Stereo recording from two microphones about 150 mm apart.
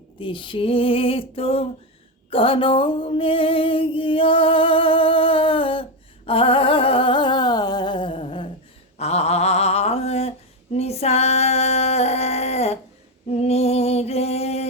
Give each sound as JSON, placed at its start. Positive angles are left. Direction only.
{"t": 0.2, "sound": "music", "side_deg": 35}
{"t": 6.2, "sound": "humming", "side_deg": 35}
{"t": 9.0, "sound": "a sound", "side_deg": 45}
{"t": 10.8, "sound": "female singing", "side_deg": 45}
{"t": 13.3, "sound": "music", "side_deg": 45}